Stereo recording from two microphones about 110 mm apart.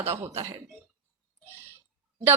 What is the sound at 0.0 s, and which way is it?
Speech, 65° right (ahead or behind).